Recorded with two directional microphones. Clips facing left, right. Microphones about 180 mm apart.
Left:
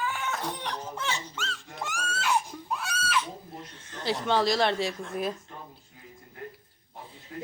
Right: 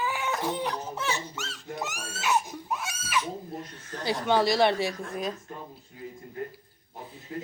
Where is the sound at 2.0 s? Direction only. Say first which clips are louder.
Left 1 dB; 20° right (ahead or behind).